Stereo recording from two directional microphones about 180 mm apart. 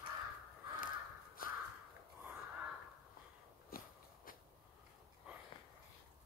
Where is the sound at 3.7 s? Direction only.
55° left (ahead or behind).